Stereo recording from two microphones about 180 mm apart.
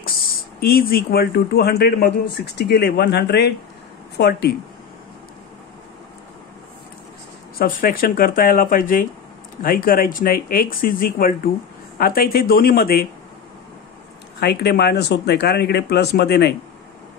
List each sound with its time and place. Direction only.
0.6 s a man's voice: 55° left (ahead or behind)
7.5 s a man's voice: 50° left (ahead or behind)
14.4 s a man's voice: 65° left (ahead or behind)